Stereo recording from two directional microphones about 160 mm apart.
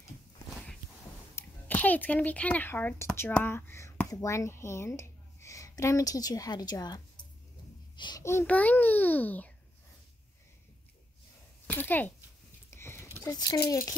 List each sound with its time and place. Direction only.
1.3 s speech: 10° left (ahead or behind)
7.9 s a sound: 30° left (ahead or behind)
8.2 s a child's voice: 15° left (ahead or behind)
11.7 s a child's voice: 10° left (ahead or behind)
12.7 s a sound: 15° left (ahead or behind)
13.2 s speech: 20° left (ahead or behind)